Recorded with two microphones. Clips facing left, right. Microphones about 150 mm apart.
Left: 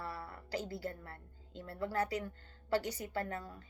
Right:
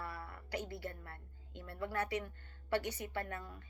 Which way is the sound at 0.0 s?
30° left (ahead or behind).